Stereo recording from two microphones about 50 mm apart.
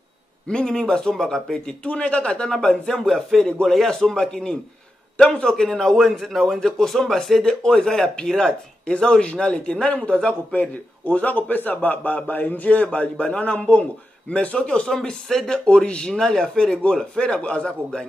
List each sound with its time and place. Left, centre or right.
0.5 s speech: centre
1.9 s a man's voice: left
3.0 s a man's voice: centre; by 15.0 s left
15.0 s speech: centre
16.7 s a man's voice: left